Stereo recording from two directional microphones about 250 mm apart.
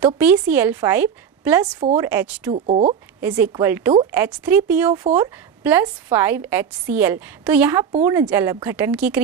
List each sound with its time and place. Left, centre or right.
0.0 s a woman's voice: centre
2.5 s speech: right
3.2 s a woman's voice: centre